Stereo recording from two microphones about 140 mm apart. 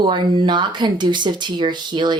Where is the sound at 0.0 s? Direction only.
35° right (ahead or behind).